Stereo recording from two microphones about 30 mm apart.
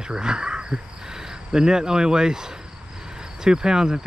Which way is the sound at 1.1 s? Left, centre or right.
Right.